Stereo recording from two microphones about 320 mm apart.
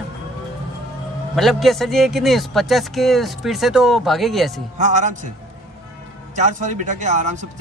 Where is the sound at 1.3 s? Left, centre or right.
Centre.